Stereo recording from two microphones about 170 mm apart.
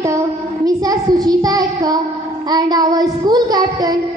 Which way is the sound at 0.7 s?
20° right (ahead or behind).